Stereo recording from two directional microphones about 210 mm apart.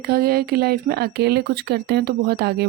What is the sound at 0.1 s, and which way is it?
Speech, 45° right (ahead or behind).